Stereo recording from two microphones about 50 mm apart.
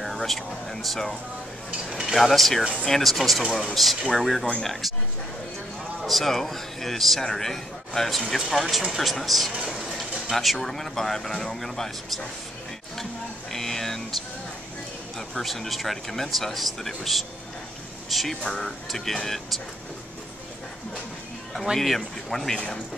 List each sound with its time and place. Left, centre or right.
0.0 s speech: centre
1.9 s speech: centre
2.1 s speech: centre
6.0 s speech: centre
9.6 s speech: centre
10.3 s speech: centre
13.5 s a sound: centre
15.1 s speech: centre
21.7 s speech: centre